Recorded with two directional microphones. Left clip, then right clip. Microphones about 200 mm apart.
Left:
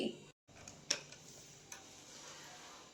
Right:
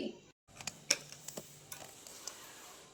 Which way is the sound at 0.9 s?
25° right (ahead or behind).